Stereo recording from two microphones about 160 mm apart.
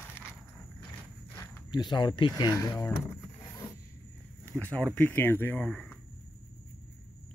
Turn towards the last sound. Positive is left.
turn(degrees=0)  # may be behind; listen again after turning